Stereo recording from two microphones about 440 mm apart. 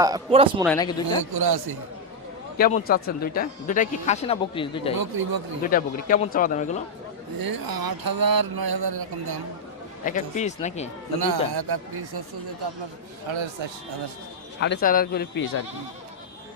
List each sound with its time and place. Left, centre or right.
0.0 s a man's voice: centre
0.6 s speech: centre
1.2 s speech: right
2.6 s speech: centre
4.9 s a sound: right
5.6 s speech: centre
7.3 s a sound: right
10.0 s speech: centre
11.5 s speech: right
13.2 s speech: right
14.6 s speech: left